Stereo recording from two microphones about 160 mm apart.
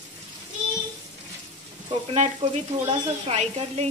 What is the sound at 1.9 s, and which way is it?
Speech, 40° right (ahead or behind).